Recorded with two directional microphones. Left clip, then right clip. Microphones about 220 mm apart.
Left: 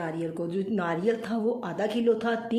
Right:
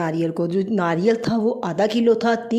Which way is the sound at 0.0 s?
45° right (ahead or behind).